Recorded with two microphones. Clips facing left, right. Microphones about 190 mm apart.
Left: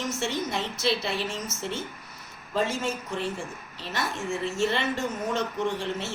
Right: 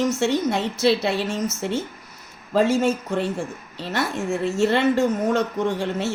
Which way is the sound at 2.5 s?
65° right (ahead or behind).